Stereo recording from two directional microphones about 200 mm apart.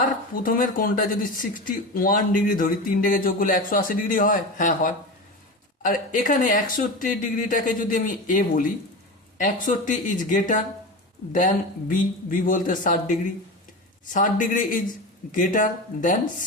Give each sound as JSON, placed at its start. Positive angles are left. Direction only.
{"t": 0.0, "sound": "speech", "side_deg": 45}